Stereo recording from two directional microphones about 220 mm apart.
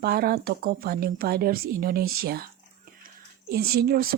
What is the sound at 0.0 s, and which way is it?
A woman's voice, 45° right (ahead or behind).